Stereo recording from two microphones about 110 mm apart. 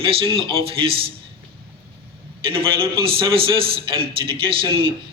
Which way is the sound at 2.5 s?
55° right (ahead or behind).